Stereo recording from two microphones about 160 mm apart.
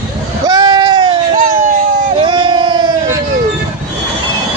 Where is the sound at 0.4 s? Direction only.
25° right (ahead or behind).